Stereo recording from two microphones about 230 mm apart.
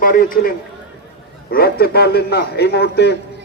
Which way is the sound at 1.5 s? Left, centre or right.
Left.